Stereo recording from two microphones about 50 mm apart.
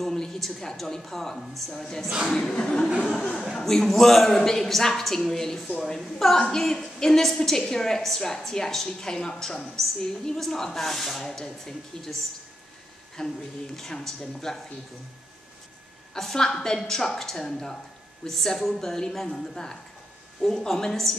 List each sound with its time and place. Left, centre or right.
0.0 s a woman's voice: centre
13.2 s a woman's voice: centre
16.2 s a woman's voice: centre